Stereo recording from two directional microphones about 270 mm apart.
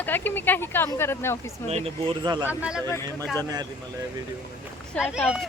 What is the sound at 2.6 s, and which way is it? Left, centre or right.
Speech, centre.